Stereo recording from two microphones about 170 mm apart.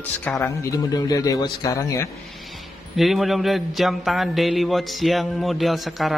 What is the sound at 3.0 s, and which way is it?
A man's voice, centre (ahead or behind).